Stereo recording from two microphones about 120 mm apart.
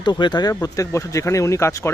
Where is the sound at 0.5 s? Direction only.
25° left (ahead or behind).